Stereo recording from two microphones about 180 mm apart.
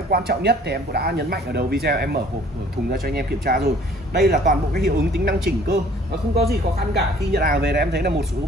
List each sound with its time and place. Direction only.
0.1 s a man's voice: 60° right (ahead or behind)